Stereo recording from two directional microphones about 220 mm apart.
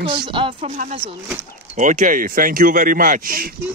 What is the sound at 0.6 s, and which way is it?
Speech, 35° right (ahead or behind).